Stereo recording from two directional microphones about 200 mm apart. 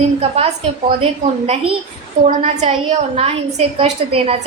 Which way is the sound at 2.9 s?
30° right (ahead or behind).